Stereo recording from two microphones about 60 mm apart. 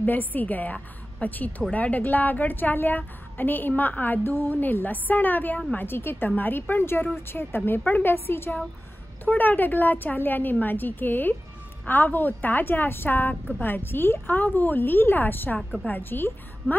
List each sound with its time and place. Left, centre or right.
0.0 s a woman's voice: left
9.2 s a woman's voice: left